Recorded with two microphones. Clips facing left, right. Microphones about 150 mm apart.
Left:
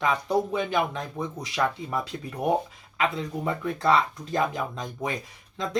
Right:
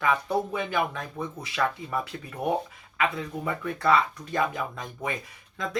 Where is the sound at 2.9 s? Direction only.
20° left (ahead or behind).